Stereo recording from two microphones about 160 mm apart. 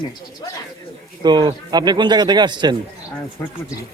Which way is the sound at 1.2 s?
25° right (ahead or behind).